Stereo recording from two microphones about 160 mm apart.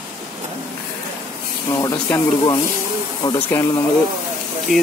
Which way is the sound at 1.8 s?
20° left (ahead or behind).